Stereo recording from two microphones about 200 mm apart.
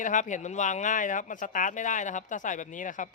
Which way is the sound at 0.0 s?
40° left (ahead or behind).